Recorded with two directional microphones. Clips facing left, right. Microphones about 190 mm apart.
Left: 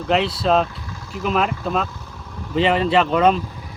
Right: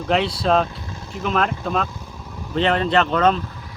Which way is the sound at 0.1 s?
Centre (ahead or behind).